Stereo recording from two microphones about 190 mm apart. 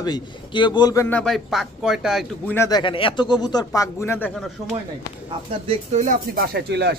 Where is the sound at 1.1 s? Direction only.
Centre (ahead or behind).